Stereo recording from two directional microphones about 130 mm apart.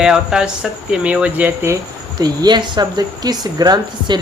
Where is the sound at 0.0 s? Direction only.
5° right (ahead or behind).